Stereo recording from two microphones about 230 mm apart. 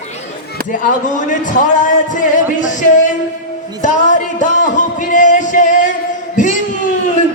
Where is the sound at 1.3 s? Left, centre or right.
Left.